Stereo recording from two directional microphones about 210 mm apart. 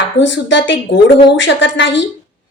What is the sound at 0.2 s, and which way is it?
Speech, 60° left (ahead or behind).